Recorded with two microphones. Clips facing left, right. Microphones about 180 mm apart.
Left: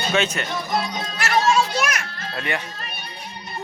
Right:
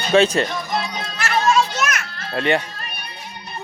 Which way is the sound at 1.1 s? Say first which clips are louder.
Right 1 dB; 20° left (ahead or behind).